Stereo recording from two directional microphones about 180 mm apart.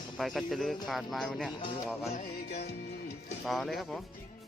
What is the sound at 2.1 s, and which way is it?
Music, 40° left (ahead or behind).